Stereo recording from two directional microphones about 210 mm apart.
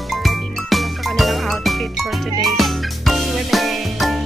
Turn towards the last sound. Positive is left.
turn(degrees=0)  # may be behind; listen again after turning